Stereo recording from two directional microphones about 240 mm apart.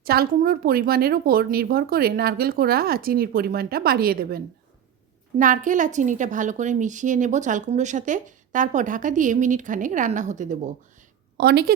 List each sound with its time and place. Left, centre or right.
0.0 s a woman's voice: right